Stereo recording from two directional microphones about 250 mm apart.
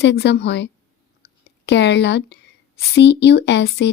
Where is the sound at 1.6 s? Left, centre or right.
Left.